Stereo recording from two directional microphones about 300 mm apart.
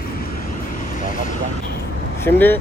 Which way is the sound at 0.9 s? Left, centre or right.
Left.